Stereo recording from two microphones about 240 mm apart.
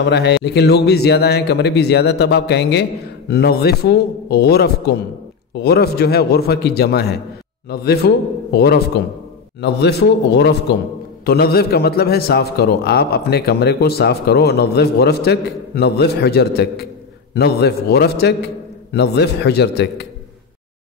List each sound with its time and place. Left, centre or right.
0.0 s a man's voice: left